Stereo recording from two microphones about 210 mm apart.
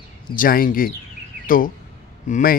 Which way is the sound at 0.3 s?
45° left (ahead or behind).